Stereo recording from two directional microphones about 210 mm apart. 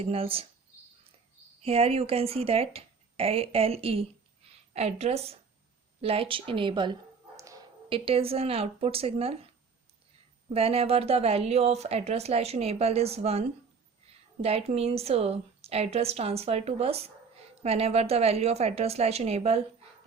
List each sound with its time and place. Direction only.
0.0 s speech: 25° right (ahead or behind)
1.6 s speech: 30° right (ahead or behind)
10.5 s speech: 30° right (ahead or behind)
14.4 s speech: 30° right (ahead or behind)